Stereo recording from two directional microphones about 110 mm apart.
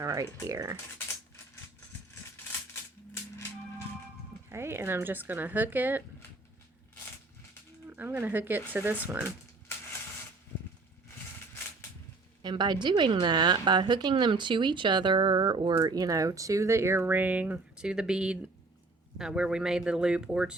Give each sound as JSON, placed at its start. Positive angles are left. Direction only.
{"t": 0.0, "sound": "speech", "side_deg": -30}
{"t": 4.4, "sound": "speech", "side_deg": -25}
{"t": 7.9, "sound": "speech", "side_deg": -20}
{"t": 12.4, "sound": "a woman's voice", "side_deg": -40}